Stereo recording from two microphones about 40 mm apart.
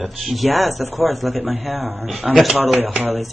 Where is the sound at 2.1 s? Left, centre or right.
Right.